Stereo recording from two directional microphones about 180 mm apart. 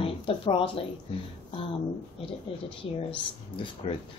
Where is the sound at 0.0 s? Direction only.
30° left (ahead or behind).